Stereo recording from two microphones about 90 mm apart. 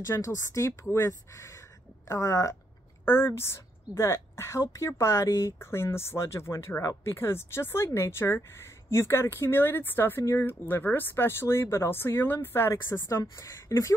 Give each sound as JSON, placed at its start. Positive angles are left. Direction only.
{"t": 0.0, "sound": "a woman's voice", "side_deg": 35}